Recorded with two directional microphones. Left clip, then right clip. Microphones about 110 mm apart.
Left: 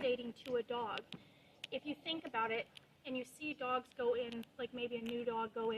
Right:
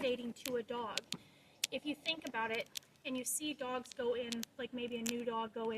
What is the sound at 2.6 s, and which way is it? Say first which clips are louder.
Speech: right 3 dB; 75° right (ahead or behind).